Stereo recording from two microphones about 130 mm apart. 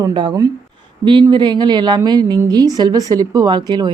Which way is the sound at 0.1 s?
35° right (ahead or behind).